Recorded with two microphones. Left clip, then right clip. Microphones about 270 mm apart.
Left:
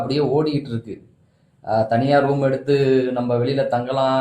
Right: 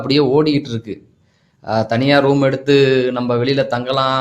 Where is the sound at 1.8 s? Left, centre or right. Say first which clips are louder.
Right 5 dB; right.